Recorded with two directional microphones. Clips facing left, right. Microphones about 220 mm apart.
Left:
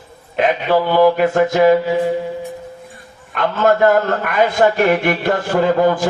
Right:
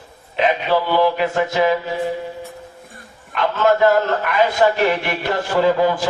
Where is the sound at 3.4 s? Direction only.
50° left (ahead or behind).